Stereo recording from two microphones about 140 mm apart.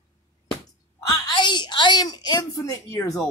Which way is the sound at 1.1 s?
35° left (ahead or behind).